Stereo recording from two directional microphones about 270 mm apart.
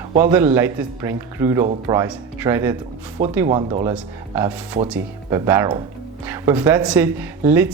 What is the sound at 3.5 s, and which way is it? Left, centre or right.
Speech, right.